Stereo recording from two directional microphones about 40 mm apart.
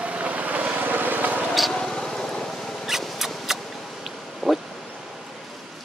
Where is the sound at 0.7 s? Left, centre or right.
Right.